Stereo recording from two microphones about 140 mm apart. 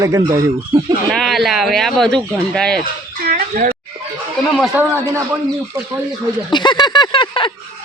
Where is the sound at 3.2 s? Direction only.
90° right.